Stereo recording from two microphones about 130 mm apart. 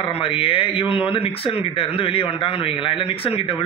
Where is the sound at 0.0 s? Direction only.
45° left (ahead or behind).